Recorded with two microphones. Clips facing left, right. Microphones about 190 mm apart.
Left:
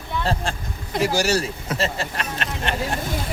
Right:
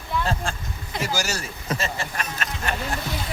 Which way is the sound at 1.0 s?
30° left (ahead or behind).